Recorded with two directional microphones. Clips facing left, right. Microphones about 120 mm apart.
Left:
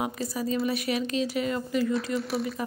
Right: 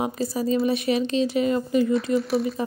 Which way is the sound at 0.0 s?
30° right (ahead or behind).